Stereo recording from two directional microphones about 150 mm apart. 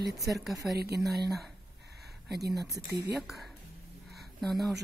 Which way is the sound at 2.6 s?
20° right (ahead or behind).